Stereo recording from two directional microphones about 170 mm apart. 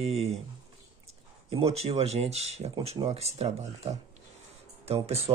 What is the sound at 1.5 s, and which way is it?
Speech, 35° right (ahead or behind).